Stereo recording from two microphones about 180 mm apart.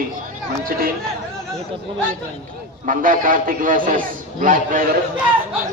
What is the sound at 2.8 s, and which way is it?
A man's voice, 50° right (ahead or behind).